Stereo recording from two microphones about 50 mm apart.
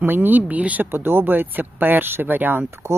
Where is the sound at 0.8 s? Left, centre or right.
Right.